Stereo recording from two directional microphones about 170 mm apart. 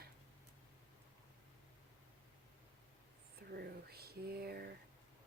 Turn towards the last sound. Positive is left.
turn(degrees=-65)  # may be behind; listen again after turning